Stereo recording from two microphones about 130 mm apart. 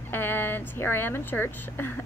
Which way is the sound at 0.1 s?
15° left (ahead or behind).